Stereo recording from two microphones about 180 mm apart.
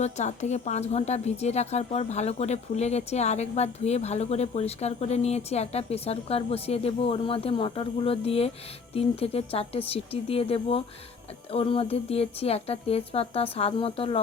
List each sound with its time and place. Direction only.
0.0 s a woman's voice: 40° left (ahead or behind)